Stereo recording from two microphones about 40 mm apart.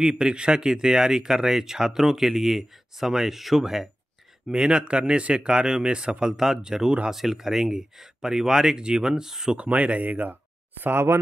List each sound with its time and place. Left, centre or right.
0.0 s speech: centre
4.5 s speech: centre
6.3 s speech: centre
9.6 s speech: right
10.8 s speech: right